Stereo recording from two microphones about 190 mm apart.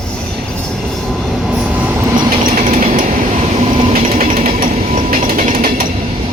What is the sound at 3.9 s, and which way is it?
Train, 40° right (ahead or behind).